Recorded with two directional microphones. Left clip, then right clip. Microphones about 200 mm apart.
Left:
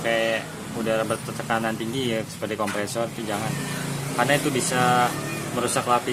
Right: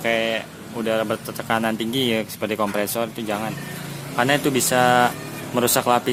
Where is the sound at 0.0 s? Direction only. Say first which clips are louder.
Right 1 dB; 35° right (ahead or behind).